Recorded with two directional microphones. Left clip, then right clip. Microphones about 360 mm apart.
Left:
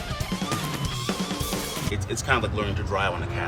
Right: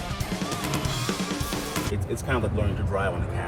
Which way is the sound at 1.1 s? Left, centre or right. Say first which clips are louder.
Even; centre.